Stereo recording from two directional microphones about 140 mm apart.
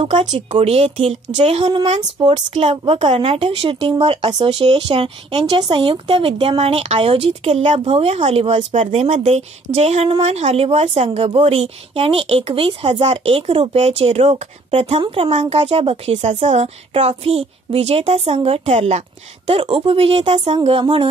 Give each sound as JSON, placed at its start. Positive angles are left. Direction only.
{"t": 0.5, "sound": "a woman's voice", "side_deg": -50}